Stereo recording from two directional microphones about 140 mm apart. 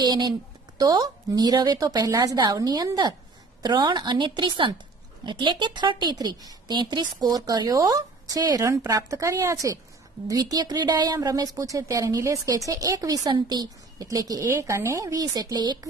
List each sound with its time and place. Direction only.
0.0 s a woman's voice: 30° right (ahead or behind)